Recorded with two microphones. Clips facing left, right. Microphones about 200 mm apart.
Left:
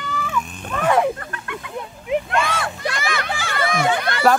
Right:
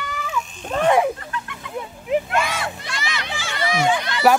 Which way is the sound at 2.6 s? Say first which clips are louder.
Left 4 dB; 55° left (ahead or behind).